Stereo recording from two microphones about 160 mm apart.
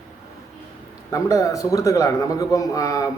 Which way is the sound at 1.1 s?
20° left (ahead or behind).